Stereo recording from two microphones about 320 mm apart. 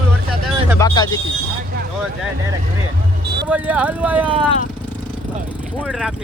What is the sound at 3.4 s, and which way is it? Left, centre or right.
Speech, centre.